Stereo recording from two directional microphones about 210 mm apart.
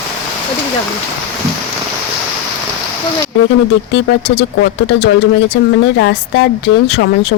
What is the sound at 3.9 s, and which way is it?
Speech, 55° left (ahead or behind).